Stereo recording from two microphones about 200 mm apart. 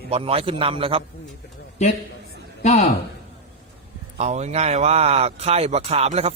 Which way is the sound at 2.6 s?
35° left (ahead or behind).